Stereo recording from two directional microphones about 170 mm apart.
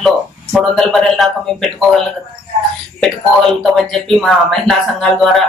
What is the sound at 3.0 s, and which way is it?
Speech, centre (ahead or behind).